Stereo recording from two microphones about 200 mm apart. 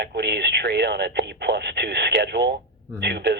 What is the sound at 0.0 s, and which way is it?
Speech, 55° right (ahead or behind).